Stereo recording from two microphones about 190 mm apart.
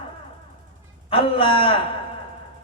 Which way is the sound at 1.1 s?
30° left (ahead or behind).